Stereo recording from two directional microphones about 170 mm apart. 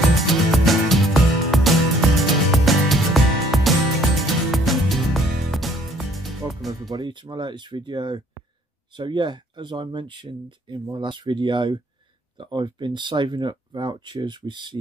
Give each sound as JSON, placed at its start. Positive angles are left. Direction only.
{"t": 0.3, "sound": "music", "side_deg": 0}
{"t": 6.7, "sound": "speech", "side_deg": -25}